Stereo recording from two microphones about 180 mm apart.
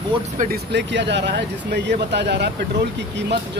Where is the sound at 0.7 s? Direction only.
75° right (ahead or behind).